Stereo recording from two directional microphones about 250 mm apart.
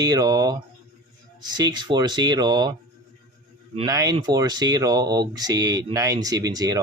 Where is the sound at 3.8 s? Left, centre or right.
Centre.